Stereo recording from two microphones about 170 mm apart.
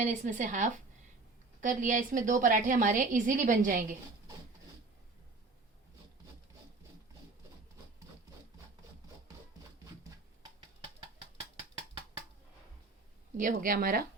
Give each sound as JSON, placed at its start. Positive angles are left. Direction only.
{"t": 0.0, "sound": "a woman's voice", "side_deg": -45}
{"t": 11.3, "sound": "gears", "side_deg": -30}
{"t": 13.3, "sound": "speech", "side_deg": -50}